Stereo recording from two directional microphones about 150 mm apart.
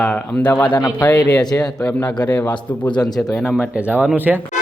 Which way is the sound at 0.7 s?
30° left (ahead or behind).